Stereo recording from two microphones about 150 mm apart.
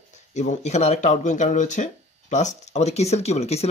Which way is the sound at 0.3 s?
55° left (ahead or behind).